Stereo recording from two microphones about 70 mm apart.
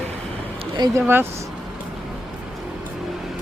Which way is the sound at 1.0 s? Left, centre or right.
Right.